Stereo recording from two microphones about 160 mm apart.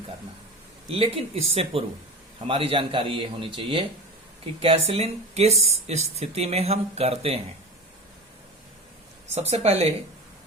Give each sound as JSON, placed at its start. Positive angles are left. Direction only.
{"t": 0.9, "sound": "speech", "side_deg": -35}
{"t": 9.5, "sound": "speech", "side_deg": -40}